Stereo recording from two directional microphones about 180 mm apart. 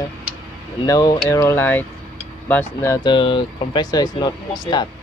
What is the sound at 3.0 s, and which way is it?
Speech, 25° left (ahead or behind).